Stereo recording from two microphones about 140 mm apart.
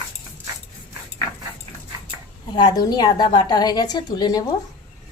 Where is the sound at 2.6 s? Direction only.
30° left (ahead or behind).